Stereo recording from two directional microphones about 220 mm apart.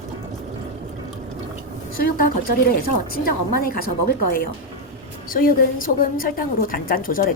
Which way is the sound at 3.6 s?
40° left (ahead or behind).